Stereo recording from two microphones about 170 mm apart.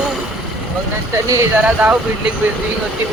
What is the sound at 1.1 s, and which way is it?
Speech, 15° right (ahead or behind).